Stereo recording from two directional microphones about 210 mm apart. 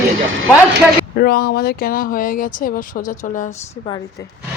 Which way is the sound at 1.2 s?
50° left (ahead or behind).